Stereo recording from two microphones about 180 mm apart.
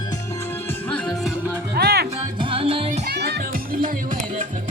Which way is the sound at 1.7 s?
65° right (ahead or behind).